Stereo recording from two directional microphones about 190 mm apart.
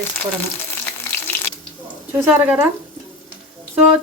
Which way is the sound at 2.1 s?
10° right (ahead or behind).